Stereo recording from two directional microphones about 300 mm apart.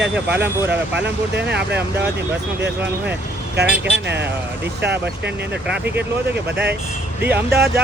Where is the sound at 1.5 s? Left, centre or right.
Right.